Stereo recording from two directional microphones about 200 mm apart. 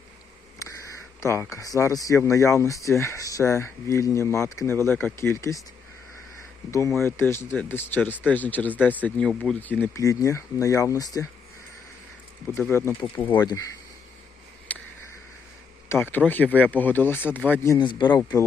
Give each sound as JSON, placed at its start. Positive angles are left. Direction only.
{"t": 1.2, "sound": "speech", "side_deg": 15}
{"t": 6.7, "sound": "speech", "side_deg": 15}
{"t": 12.5, "sound": "speech", "side_deg": 10}
{"t": 14.7, "sound": "a sound", "side_deg": 5}
{"t": 15.9, "sound": "speech", "side_deg": 10}